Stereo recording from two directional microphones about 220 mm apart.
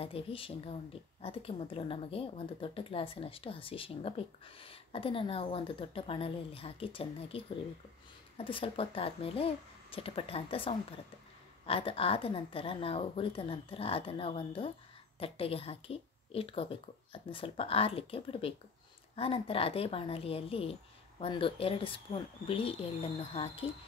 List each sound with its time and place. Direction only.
0.0 s a woman's voice: 25° left (ahead or behind)
8.5 s a woman's voice: 25° left (ahead or behind)